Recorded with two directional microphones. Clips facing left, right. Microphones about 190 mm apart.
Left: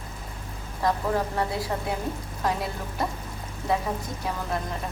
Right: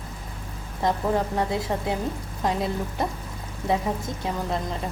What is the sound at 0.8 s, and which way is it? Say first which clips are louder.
A woman's voice: right 2 dB; 20° right (ahead or behind).